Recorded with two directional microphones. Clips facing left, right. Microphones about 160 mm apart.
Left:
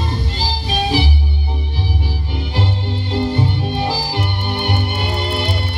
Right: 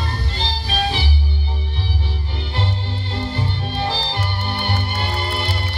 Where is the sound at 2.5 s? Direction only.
20° left (ahead or behind).